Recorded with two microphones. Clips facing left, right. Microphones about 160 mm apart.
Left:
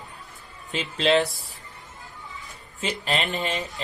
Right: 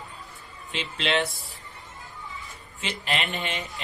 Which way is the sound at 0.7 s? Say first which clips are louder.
Left 5 dB; 40° left (ahead or behind).